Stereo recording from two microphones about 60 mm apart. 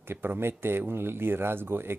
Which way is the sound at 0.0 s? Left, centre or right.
Right.